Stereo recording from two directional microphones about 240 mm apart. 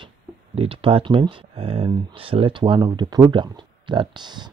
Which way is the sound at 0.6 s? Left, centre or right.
Right.